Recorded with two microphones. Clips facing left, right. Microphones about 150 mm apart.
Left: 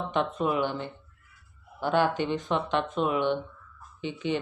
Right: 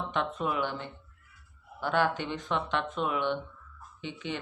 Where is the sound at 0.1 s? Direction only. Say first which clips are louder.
Left 5 dB; 15° left (ahead or behind).